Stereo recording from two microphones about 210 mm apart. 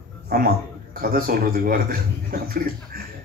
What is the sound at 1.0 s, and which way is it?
A man's voice, 45° right (ahead or behind).